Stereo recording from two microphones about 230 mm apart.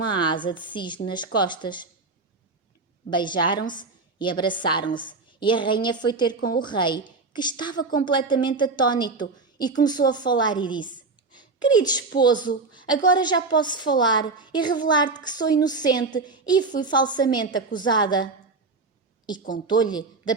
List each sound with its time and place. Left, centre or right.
0.1 s a woman's voice: left
3.1 s a woman's voice: centre
19.6 s a woman's voice: centre